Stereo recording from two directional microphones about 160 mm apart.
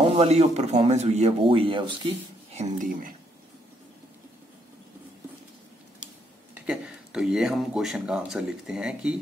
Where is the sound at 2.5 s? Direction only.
50° right (ahead or behind).